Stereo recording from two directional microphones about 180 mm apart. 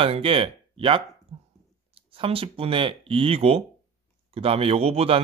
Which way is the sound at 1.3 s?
35° right (ahead or behind).